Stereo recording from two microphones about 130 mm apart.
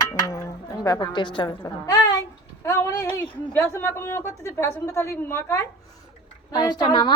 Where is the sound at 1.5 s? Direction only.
30° left (ahead or behind).